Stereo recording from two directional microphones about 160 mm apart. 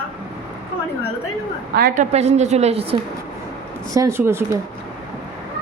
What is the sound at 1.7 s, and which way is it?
A woman's voice, 60° right (ahead or behind).